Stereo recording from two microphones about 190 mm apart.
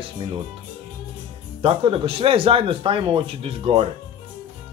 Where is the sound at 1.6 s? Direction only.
30° right (ahead or behind).